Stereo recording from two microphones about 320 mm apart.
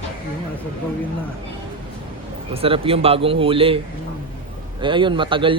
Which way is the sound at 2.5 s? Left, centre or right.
Centre.